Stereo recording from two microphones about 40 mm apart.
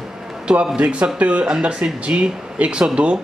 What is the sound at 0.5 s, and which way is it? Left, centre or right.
A man's voice, right.